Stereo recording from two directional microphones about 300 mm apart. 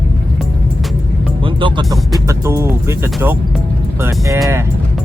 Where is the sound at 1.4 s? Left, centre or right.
Centre.